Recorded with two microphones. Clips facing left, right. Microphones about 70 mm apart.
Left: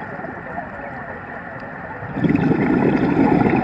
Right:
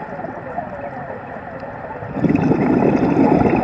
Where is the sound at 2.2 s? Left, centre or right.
Left.